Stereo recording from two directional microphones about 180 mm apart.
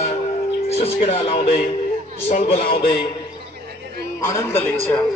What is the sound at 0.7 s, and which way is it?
Speech, 35° left (ahead or behind).